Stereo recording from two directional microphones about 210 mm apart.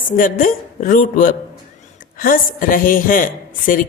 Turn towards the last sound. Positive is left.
turn(degrees=40)  # may be behind; listen again after turning